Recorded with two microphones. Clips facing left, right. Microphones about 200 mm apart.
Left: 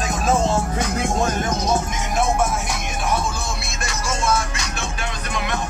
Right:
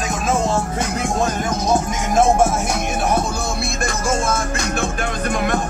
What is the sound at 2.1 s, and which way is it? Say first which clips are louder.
Music: right 6 dB; 45° right (ahead or behind).